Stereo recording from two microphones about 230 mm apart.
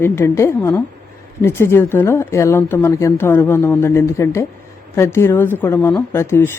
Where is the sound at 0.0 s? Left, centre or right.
Centre.